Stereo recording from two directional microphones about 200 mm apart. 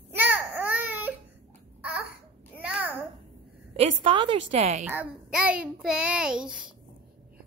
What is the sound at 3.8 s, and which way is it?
A woman's voice, 30° right (ahead or behind).